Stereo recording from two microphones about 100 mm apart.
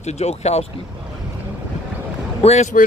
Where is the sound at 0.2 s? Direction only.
90° left.